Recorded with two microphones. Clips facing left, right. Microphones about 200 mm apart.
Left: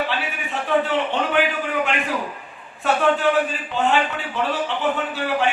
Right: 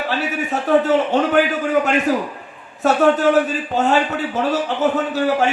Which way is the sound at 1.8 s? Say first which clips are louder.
Right 6 dB; 40° right (ahead or behind).